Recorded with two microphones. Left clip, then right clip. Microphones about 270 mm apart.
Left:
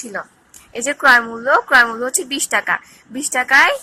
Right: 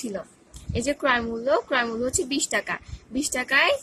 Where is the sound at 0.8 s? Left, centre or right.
Centre.